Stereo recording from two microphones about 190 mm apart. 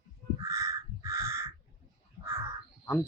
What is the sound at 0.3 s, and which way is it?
Crow, 15° right (ahead or behind).